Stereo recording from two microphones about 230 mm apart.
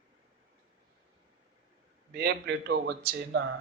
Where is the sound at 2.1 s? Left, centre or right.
Right.